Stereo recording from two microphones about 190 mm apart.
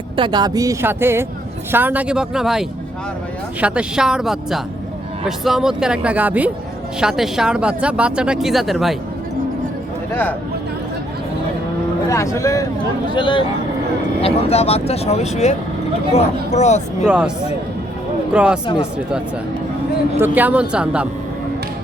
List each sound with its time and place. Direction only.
0.2 s speech: 20° right (ahead or behind); by 9.0 s centre (ahead or behind)
10.1 s speech: 10° left (ahead or behind)
12.0 s speech: 15° left (ahead or behind); by 17.1 s 35° left (ahead or behind)
17.1 s speech: 5° right (ahead or behind)
18.3 s speech: 5° right (ahead or behind)
18.6 s speech: 25° left (ahead or behind)
20.1 s speech: 10° right (ahead or behind)